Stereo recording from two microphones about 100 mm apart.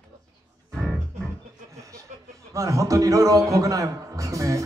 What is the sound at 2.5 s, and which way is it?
A man's voice, 30° right (ahead or behind).